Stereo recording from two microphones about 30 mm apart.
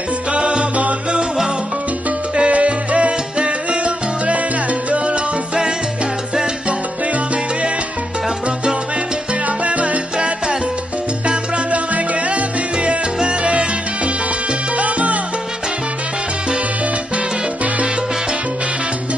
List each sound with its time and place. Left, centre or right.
0.3 s music: right
2.5 s salsa music: right
9.3 s salsa music: right
11.7 s music: right
14.8 s salsa music: right